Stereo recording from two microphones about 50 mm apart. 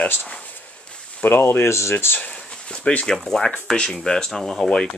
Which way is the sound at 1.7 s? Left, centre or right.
Left.